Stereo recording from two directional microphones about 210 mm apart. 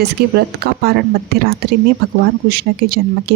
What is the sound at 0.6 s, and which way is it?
Speech, 50° right (ahead or behind).